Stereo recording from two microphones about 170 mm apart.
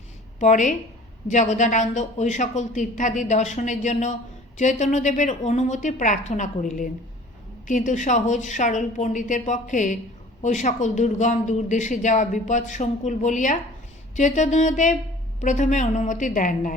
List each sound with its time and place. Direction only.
0.3 s speech: 45° left (ahead or behind)